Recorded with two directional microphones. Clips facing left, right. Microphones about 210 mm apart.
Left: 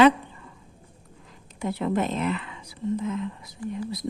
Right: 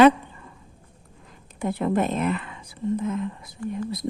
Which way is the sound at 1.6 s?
50° right (ahead or behind).